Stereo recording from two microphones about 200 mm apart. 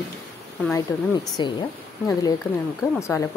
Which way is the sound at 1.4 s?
20° left (ahead or behind).